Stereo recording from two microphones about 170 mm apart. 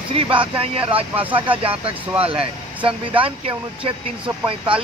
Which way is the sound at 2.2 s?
35° right (ahead or behind).